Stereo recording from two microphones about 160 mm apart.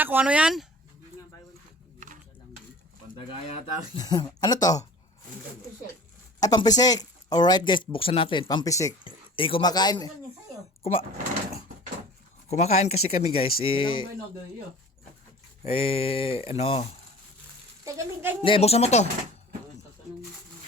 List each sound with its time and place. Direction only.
0.0 s speech: 10° right (ahead or behind)
2.0 s a sound: 50° right (ahead or behind)
3.9 s speech: 25° left (ahead or behind)
6.4 s speech: 25° left (ahead or behind)
9.0 s speech: 35° left (ahead or behind)
12.5 s speech: 45° left (ahead or behind)
15.6 s speech: 35° left (ahead or behind)
17.8 s speech: 15° right (ahead or behind)
18.4 s speech: 35° left (ahead or behind)